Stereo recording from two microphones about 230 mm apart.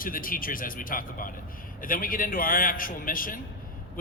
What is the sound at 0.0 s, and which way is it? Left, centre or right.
A man's voice, left.